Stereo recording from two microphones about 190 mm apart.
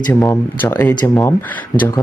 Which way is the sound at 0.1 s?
15° left (ahead or behind).